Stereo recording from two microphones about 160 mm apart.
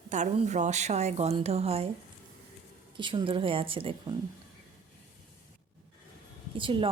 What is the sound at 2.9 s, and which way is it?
A woman's voice, 30° right (ahead or behind).